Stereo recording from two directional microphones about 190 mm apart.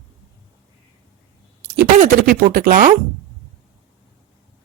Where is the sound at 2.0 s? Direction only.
50° right (ahead or behind).